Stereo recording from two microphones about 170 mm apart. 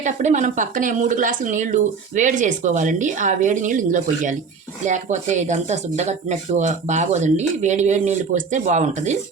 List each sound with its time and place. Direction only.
0.0 s speech: 45° right (ahead or behind)